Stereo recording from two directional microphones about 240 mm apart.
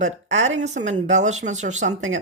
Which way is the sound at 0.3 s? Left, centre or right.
Right.